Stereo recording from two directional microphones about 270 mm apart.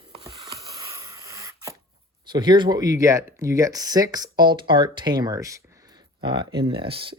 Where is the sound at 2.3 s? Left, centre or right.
Centre.